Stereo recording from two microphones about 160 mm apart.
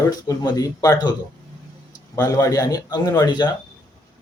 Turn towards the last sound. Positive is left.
turn(degrees=25)  # may be behind; listen again after turning